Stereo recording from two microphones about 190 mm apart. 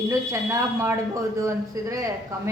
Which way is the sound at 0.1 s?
15° right (ahead or behind).